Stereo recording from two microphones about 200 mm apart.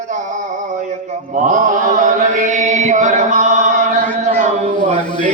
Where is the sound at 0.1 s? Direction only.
40° right (ahead or behind).